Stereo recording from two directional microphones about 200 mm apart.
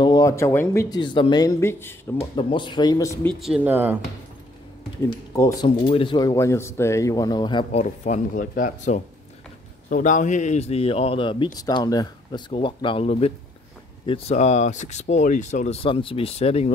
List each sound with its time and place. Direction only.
0.0 s speech: 20° left (ahead or behind)
2.1 s a man's voice: 25° left (ahead or behind)
3.3 s speech: 5° right (ahead or behind)
5.0 s speech: 15° left (ahead or behind)
5.9 s speech: 25° left (ahead or behind)
7.8 s a man's voice: 40° left (ahead or behind)